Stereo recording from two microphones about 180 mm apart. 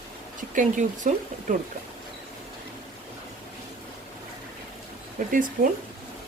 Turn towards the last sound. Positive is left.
turn(degrees=-50)  # may be behind; listen again after turning